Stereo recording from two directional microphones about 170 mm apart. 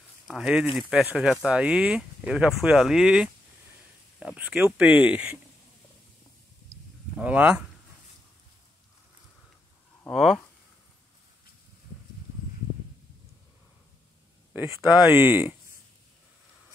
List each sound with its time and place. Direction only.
0.3 s speech: 5° right (ahead or behind)
7.2 s speech: 10° right (ahead or behind)
10.1 s speech: centre (ahead or behind)
14.8 s speech: 25° left (ahead or behind)
15.1 s speech: 10° right (ahead or behind)